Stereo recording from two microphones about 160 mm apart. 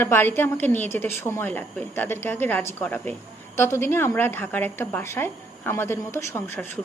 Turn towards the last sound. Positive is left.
turn(degrees=15)  # may be behind; listen again after turning